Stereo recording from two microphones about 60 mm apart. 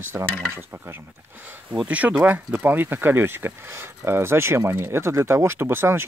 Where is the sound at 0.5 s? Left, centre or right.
Right.